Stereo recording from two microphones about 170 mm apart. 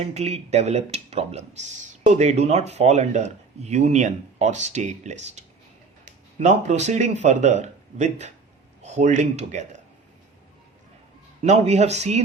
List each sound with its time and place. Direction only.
0.0 s speech: 40° right (ahead or behind)
11.4 s speech: 40° right (ahead or behind)